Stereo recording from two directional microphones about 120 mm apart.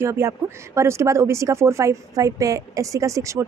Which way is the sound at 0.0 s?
25° right (ahead or behind).